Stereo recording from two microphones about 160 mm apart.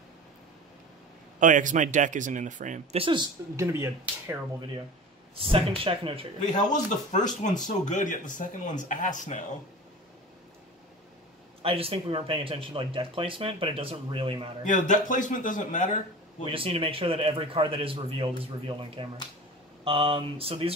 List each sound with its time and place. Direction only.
1.4 s speech: 50° right (ahead or behind)
3.0 s speech: 30° right (ahead or behind)
3.5 s speech: 15° right (ahead or behind)
5.3 s speech: 35° right (ahead or behind)
6.4 s speech: 50° left (ahead or behind)
11.6 s speech: 35° right (ahead or behind)
14.7 s speech: 55° left (ahead or behind)
16.4 s speech: 35° right (ahead or behind)